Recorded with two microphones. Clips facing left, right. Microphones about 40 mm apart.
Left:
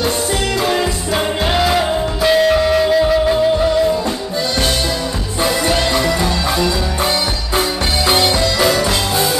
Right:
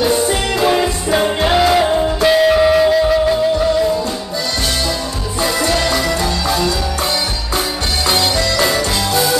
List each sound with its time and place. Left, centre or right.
0.0 s music: centre
5.4 s music: centre
8.1 s music: centre